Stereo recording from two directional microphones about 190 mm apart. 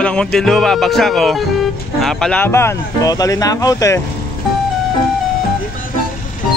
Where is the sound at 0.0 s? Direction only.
5° left (ahead or behind).